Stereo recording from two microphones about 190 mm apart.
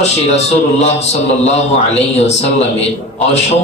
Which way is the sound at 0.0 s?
35° left (ahead or behind).